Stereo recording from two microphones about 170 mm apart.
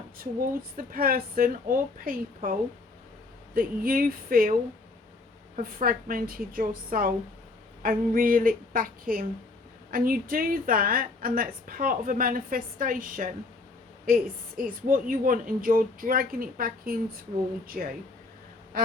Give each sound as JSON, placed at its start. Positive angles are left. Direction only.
{"t": 0.8, "sound": "a woman's voice", "side_deg": -60}
{"t": 5.5, "sound": "a woman's voice", "side_deg": -55}